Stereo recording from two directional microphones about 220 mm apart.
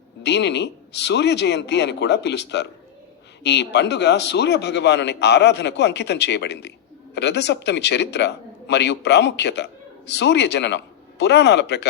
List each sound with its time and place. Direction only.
0.2 s a man's voice: 50° left (ahead or behind)